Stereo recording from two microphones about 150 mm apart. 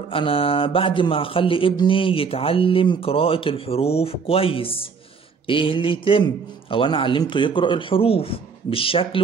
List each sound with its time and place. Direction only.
0.1 s speech: 40° left (ahead or behind)